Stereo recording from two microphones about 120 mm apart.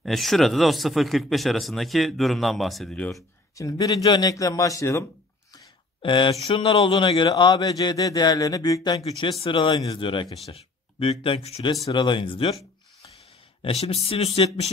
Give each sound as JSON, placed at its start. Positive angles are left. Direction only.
{"t": 0.0, "sound": "speech", "side_deg": 0}
{"t": 3.5, "sound": "a man's voice", "side_deg": 30}
{"t": 6.0, "sound": "a man's voice", "side_deg": 45}
{"t": 9.4, "sound": "speech", "side_deg": 45}
{"t": 11.9, "sound": "speech", "side_deg": 40}
{"t": 13.6, "sound": "speech", "side_deg": 50}